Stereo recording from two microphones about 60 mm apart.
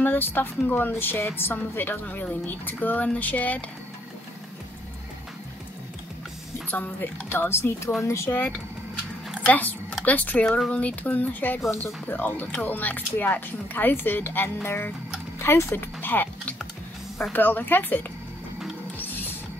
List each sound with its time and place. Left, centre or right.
0.0 s speech: left
6.7 s speech: left
9.5 s a sound: left
10.0 s speech: left
18.9 s music: left